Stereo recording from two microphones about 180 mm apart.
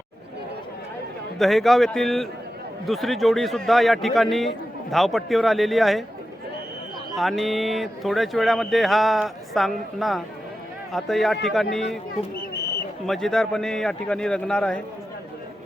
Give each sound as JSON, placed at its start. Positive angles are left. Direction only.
{"t": 1.4, "sound": "a man's voice", "side_deg": 0}
{"t": 7.2, "sound": "a man's voice", "side_deg": 0}
{"t": 13.1, "sound": "a man's voice", "side_deg": 0}